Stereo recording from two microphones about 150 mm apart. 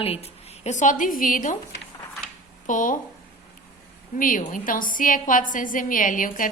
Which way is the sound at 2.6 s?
60° left (ahead or behind).